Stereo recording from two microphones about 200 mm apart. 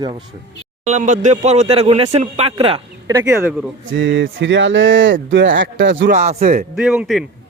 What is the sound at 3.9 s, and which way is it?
Speech, 65° right (ahead or behind).